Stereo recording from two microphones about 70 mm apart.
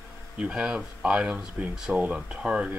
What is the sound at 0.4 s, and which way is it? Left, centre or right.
Speech, centre.